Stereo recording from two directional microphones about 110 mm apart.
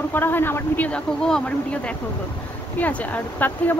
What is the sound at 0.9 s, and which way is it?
A woman's voice, 10° left (ahead or behind).